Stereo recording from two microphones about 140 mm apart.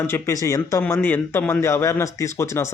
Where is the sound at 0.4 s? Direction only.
20° left (ahead or behind).